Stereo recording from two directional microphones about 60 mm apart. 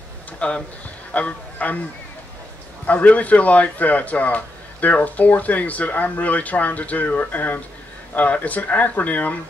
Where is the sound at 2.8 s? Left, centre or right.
Left.